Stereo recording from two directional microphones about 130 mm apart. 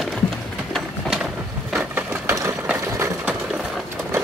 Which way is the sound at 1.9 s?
15° right (ahead or behind).